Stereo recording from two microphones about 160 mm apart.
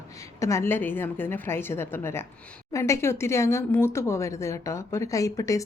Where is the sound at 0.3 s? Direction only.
20° left (ahead or behind).